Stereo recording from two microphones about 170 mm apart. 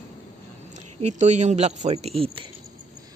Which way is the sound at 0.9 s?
45° right (ahead or behind).